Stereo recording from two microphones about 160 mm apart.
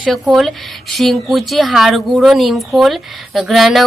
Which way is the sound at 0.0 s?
Centre (ahead or behind).